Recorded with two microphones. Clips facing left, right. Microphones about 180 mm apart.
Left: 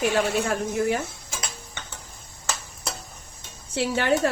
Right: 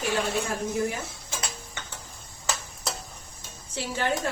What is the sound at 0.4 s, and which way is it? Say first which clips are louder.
Speech: left 4 dB; 65° left (ahead or behind).